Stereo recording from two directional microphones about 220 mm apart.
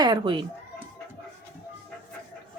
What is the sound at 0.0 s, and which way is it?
Speech, 20° right (ahead or behind).